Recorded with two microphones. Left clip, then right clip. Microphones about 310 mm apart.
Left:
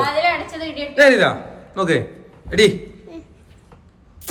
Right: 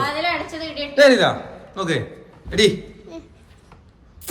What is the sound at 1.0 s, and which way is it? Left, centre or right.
A man's voice, centre.